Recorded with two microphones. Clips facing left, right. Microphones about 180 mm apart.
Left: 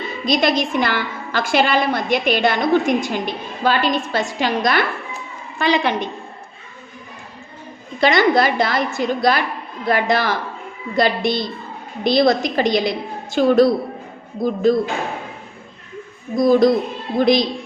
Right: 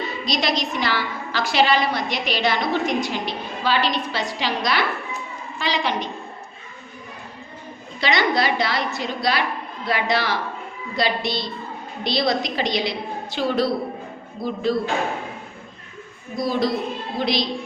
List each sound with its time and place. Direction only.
0.3 s a woman's voice: 50° left (ahead or behind)
8.0 s a woman's voice: 50° left (ahead or behind)
16.3 s a woman's voice: 50° left (ahead or behind)